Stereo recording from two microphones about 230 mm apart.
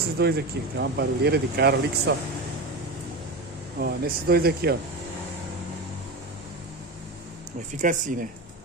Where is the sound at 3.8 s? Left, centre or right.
Right.